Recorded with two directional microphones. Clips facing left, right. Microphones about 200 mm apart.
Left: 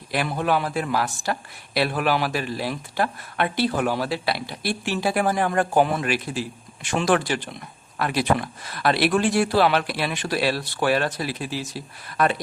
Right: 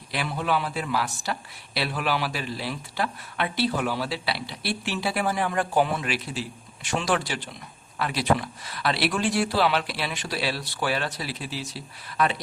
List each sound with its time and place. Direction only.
0.1 s speech: 50° left (ahead or behind)